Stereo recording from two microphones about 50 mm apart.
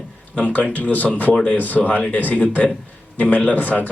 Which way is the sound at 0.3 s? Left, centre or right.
Left.